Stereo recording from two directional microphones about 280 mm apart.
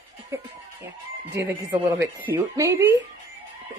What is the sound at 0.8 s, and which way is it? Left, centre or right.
Speech, centre.